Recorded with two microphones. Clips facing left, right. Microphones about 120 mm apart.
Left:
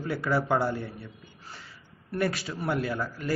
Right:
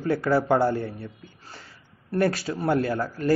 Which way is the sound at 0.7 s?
45° right (ahead or behind).